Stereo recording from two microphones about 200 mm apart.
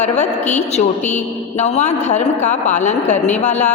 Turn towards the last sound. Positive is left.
turn(degrees=35)  # may be behind; listen again after turning